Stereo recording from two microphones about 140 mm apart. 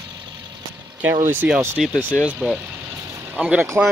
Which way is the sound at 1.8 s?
5° left (ahead or behind).